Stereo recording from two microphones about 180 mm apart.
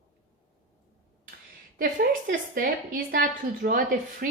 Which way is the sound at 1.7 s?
50° right (ahead or behind).